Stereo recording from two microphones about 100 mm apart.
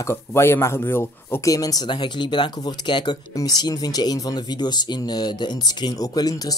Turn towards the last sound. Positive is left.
turn(degrees=40)  # may be behind; listen again after turning